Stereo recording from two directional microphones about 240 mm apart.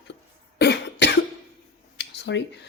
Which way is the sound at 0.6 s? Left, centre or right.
Left.